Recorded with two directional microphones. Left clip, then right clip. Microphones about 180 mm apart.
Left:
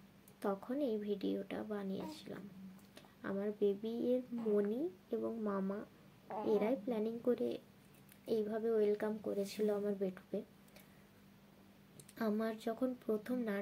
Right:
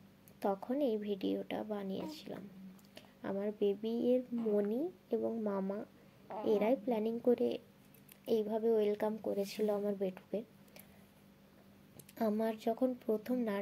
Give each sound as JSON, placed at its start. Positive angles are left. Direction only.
{"t": 0.4, "sound": "a woman's voice", "side_deg": -25}
{"t": 12.2, "sound": "a woman's voice", "side_deg": -25}